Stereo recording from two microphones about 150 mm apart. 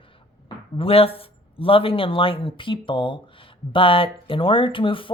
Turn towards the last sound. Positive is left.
turn(degrees=35)  # may be behind; listen again after turning